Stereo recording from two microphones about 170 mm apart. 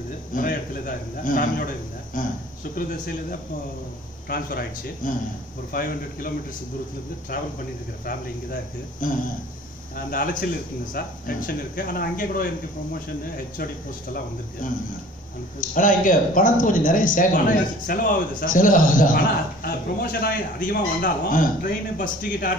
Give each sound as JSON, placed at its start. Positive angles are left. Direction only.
{"t": 0.3, "sound": "speech", "side_deg": 55}
{"t": 4.3, "sound": "speech", "side_deg": 60}
{"t": 9.0, "sound": "speech", "side_deg": 50}
{"t": 14.6, "sound": "speech", "side_deg": 55}